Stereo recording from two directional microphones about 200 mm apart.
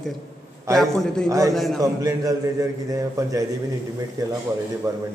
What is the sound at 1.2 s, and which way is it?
Speech, 15° right (ahead or behind).